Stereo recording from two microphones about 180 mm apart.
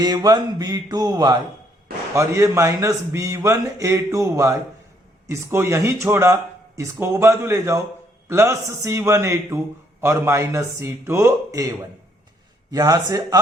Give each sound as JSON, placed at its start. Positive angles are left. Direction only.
{"t": 0.0, "sound": "mantra", "side_deg": -20}
{"t": 2.1, "sound": "speech", "side_deg": -15}
{"t": 12.7, "sound": "mantra", "side_deg": -20}